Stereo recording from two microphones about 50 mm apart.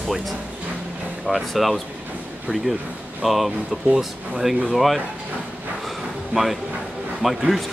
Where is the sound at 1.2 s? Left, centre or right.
Centre.